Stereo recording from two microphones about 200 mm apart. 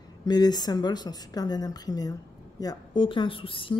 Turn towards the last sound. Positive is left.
turn(degrees=25)  # may be behind; listen again after turning